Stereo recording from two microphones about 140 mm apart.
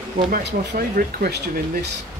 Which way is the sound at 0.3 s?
90° right.